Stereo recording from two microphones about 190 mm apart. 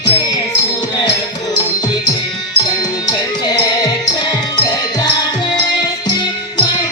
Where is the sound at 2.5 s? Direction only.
20° left (ahead or behind).